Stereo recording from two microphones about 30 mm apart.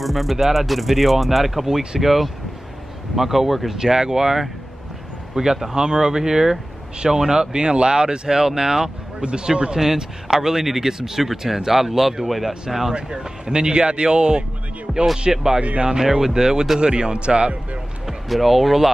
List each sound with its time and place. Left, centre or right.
0.0 s speech: centre
3.8 s speech: centre
9.2 s a man's voice: right
10.3 s speech: centre
12.6 s speech: centre
12.9 s speech: right
14.9 s music: centre
15.3 s a man's voice: centre; by 17.6 s right
18.3 s speech: centre